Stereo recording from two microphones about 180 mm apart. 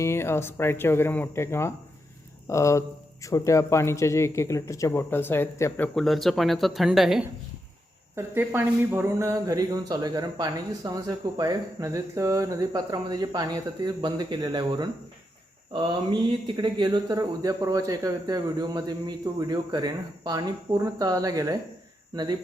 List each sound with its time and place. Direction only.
0.0 s speech: 15° left (ahead or behind); by 7.3 s centre (ahead or behind)
8.1 s speech: 10° right (ahead or behind)